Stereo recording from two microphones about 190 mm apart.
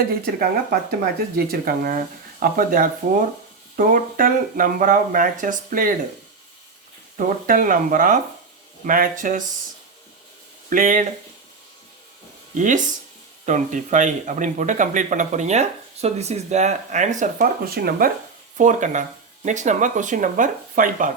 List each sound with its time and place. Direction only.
0.0 s speech: 50° right (ahead or behind)
7.2 s speech: 45° right (ahead or behind)
10.7 s speech: 45° right (ahead or behind)
12.5 s speech: 40° right (ahead or behind)
18.5 s speech: 40° right (ahead or behind)